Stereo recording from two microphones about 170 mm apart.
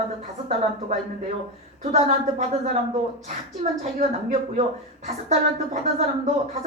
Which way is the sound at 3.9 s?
40° right (ahead or behind).